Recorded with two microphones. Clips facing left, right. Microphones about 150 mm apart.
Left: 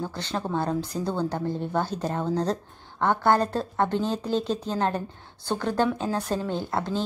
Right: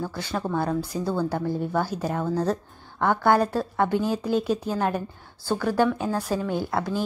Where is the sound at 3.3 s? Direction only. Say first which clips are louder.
Right 2 dB; 10° right (ahead or behind).